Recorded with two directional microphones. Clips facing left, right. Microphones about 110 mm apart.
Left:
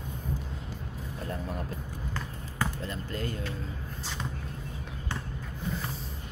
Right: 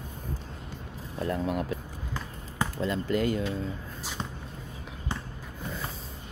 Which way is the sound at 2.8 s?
90° right.